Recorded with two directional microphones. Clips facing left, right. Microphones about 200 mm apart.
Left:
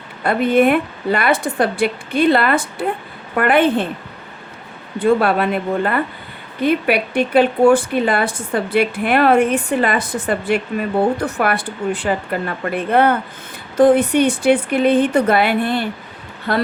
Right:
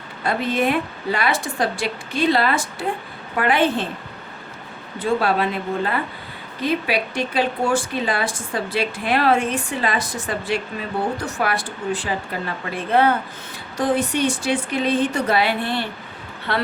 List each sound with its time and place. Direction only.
0.2 s speech: 60° left (ahead or behind)
4.9 s speech: 60° left (ahead or behind); by 16.6 s 45° left (ahead or behind)